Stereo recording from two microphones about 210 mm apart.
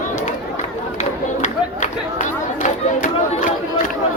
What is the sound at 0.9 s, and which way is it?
Crowd, 35° left (ahead or behind).